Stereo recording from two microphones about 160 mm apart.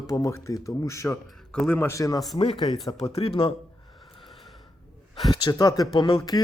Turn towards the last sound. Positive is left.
turn(degrees=35)  # may be behind; listen again after turning